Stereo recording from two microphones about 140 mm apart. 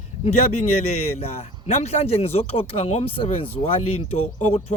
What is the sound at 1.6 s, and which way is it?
Speech, 50° left (ahead or behind).